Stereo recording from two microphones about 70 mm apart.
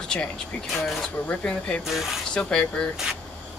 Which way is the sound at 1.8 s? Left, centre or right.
Centre.